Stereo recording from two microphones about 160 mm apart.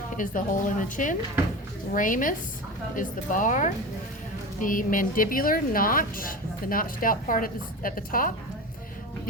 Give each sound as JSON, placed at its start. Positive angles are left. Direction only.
{"t": 0.2, "sound": "a woman's voice", "side_deg": 55}